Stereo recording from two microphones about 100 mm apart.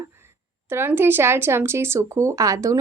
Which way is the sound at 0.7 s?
20° right (ahead or behind).